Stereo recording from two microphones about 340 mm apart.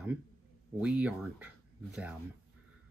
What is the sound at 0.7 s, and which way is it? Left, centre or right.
Speech, centre.